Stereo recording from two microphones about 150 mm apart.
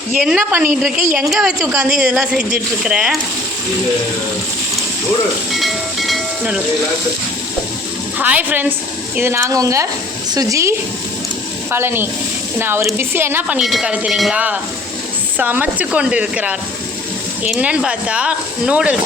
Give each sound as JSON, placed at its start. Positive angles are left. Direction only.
{"t": 0.2, "sound": "speech", "side_deg": -10}
{"t": 5.5, "sound": "speech", "side_deg": 0}
{"t": 8.2, "sound": "speech", "side_deg": -10}
{"t": 13.6, "sound": "speech", "side_deg": 0}